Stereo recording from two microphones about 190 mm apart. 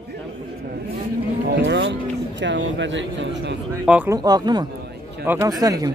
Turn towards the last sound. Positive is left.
turn(degrees=-20)  # may be behind; listen again after turning